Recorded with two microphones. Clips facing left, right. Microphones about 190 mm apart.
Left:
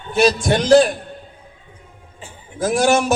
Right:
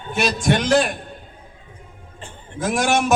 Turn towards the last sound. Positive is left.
turn(degrees=35)  # may be behind; listen again after turning